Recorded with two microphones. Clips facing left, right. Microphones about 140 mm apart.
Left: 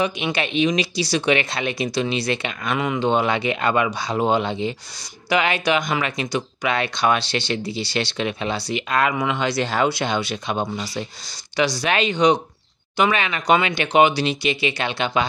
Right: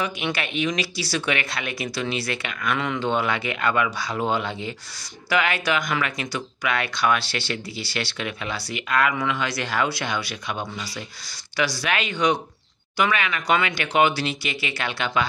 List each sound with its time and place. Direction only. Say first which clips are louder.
0.0 s speech: left 4 dB; 20° left (ahead or behind)